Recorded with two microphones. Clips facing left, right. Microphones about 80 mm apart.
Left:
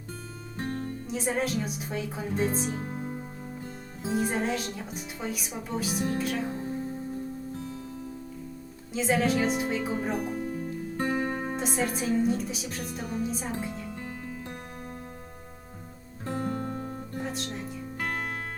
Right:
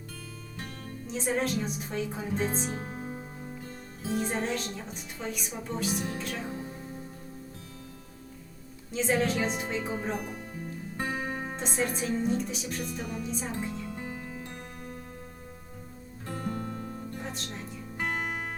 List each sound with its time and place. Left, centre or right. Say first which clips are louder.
0.5 s music: left 11 dB; left
1.0 s speech: right 1 dB; centre
2.6 s music: left 3 dB; centre
4.1 s speech: left 2 dB; centre
8.9 s speech: left 2 dB; centre
11.0 s music: left 4 dB; centre
11.5 s speech: left 2 dB; centre
12.8 s music: left 2 dB; left
13.2 s speech: left 2 dB; centre
13.9 s music: even; centre
16.2 s music: left 4 dB; left
17.2 s music: left 4 dB; centre
17.9 s music: right 1 dB; centre